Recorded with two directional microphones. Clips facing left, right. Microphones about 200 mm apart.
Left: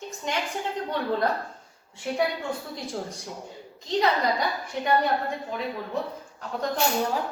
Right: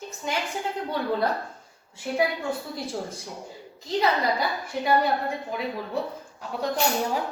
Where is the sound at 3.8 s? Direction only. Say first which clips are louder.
Even; 5° right (ahead or behind).